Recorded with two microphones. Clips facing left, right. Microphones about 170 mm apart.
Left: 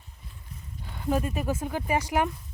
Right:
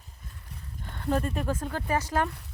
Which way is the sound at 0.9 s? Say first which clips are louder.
Left 1 dB; 10° left (ahead or behind).